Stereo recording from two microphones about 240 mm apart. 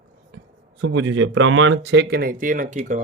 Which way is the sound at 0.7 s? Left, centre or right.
Right.